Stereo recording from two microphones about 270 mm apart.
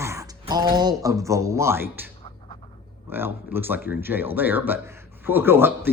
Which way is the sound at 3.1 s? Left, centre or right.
Centre.